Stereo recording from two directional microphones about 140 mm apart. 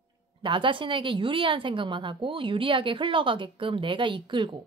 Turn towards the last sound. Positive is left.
turn(degrees=-35)  # may be behind; listen again after turning